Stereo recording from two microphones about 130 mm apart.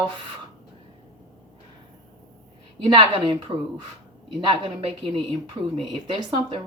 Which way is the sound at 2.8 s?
35° right (ahead or behind).